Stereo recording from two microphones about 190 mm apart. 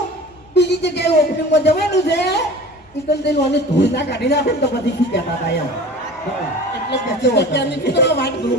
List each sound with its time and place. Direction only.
0.5 s a woman's voice: 65° left (ahead or behind)
7.2 s a man's voice: 65° left (ahead or behind)